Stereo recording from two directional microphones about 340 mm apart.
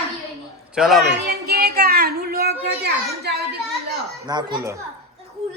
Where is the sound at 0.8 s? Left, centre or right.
Centre.